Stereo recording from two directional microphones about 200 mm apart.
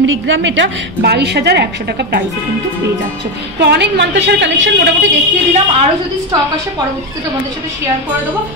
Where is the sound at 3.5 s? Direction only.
55° right (ahead or behind).